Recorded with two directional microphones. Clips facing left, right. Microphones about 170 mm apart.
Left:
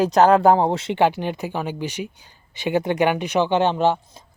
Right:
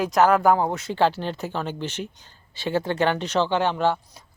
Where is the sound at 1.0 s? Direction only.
15° left (ahead or behind).